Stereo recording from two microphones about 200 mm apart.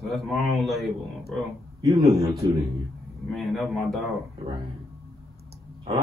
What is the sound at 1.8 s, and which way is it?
Speech, 15° right (ahead or behind).